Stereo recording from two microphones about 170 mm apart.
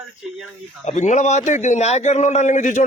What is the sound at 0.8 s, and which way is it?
A man's voice, 45° left (ahead or behind).